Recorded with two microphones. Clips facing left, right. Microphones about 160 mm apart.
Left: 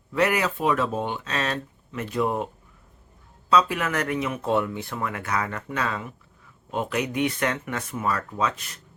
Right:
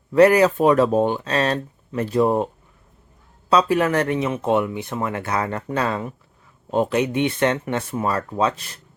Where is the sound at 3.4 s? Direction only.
35° right (ahead or behind).